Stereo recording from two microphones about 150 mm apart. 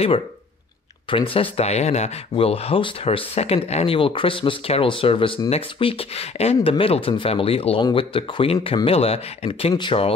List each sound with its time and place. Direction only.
1.1 s speech: 35° left (ahead or behind)